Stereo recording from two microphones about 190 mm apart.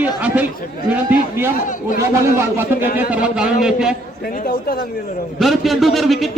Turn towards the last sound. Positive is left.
turn(degrees=0)  # may be behind; listen again after turning